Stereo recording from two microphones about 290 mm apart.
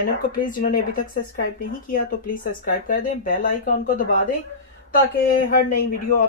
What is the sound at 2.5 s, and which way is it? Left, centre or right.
Speech, left.